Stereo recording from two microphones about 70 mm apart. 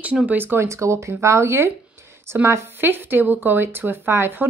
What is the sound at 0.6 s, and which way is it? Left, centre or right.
Speech, right.